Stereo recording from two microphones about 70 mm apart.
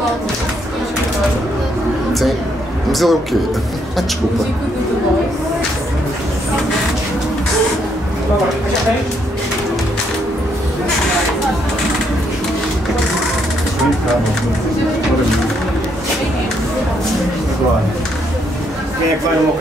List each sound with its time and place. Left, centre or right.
2.9 s a man's voice: centre